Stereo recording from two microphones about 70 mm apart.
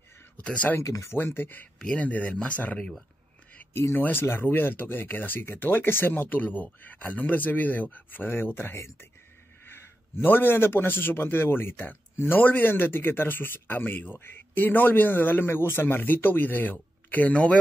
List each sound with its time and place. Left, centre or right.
0.4 s speech: centre
0.7 s speech: left
1.1 s speech: left
1.8 s a man's voice: centre
3.7 s a man's voice: left; by 17.6 s centre